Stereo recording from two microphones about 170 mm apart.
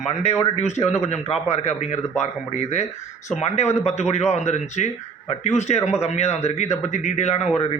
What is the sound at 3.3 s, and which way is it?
A man's voice, 40° left (ahead or behind).